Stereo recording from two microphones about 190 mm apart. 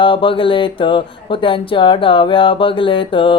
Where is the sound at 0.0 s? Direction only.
25° left (ahead or behind).